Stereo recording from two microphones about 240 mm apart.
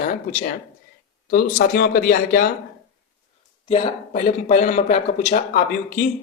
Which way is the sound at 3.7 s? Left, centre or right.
Left.